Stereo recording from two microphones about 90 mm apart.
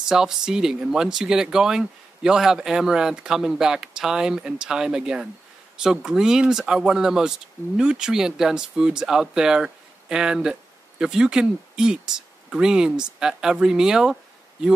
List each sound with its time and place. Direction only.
0.1 s speech: 5° right (ahead or behind)